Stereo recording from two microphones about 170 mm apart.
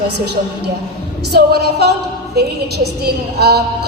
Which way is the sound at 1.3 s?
75° right (ahead or behind).